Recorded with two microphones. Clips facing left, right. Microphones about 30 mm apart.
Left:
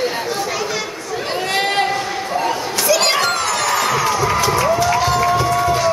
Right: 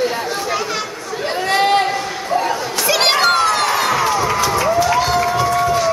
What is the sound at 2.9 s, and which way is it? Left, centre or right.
Crowd, right.